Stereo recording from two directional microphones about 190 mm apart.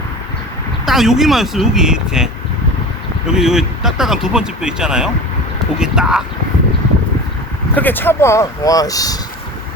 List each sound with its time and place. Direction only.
0.9 s speech: centre (ahead or behind)
3.3 s speech: 5° right (ahead or behind)
7.8 s speech: 10° left (ahead or behind)